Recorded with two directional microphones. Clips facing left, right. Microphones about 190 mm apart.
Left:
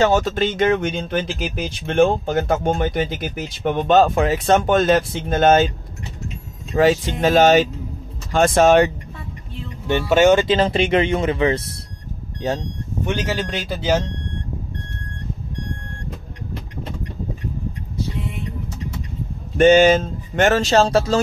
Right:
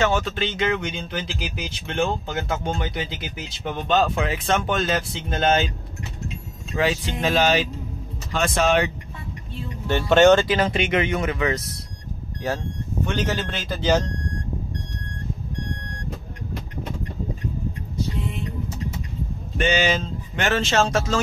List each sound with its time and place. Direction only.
0.0 s speech: 40° left (ahead or behind)
6.7 s speech: 45° left (ahead or behind)
10.0 s a man's voice: 5° left (ahead or behind)
10.4 s speech: 30° left (ahead or behind)
13.1 s a man's voice: 10° left (ahead or behind)
19.5 s speech: 50° left (ahead or behind)